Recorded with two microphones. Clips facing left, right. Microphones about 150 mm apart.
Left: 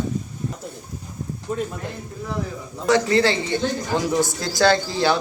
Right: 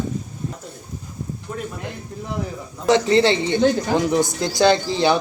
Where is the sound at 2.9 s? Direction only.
20° right (ahead or behind).